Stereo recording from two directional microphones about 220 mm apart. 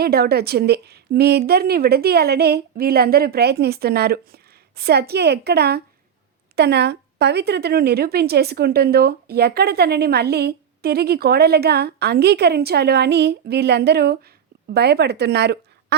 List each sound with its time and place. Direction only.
0.0 s speech: 45° right (ahead or behind)